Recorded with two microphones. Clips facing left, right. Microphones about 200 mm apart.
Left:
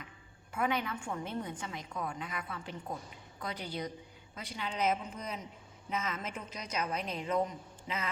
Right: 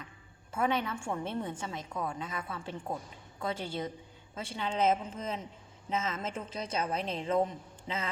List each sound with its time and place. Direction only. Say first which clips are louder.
0.5 s a woman's voice: right 2 dB; 25° right (ahead or behind)